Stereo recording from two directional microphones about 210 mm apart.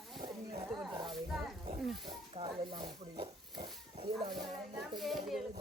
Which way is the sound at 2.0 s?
25° right (ahead or behind).